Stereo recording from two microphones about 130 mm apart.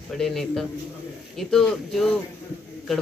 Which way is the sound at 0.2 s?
Centre (ahead or behind).